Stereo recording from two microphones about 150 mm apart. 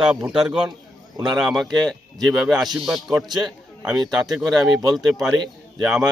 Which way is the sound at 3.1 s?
25° right (ahead or behind).